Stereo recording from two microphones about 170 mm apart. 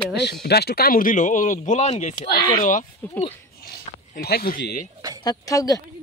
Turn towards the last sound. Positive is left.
turn(degrees=20)  # may be behind; listen again after turning